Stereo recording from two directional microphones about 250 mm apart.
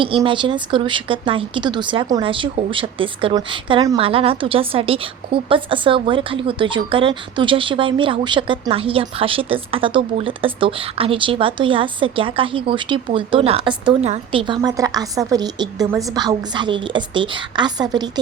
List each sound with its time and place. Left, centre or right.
0.0 s a woman's voice: centre